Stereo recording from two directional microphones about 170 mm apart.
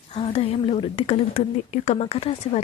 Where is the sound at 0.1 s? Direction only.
35° left (ahead or behind).